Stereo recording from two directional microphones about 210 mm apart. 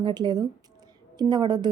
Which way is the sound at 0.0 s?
20° right (ahead or behind).